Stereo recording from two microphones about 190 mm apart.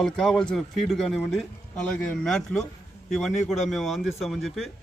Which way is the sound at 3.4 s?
35° left (ahead or behind).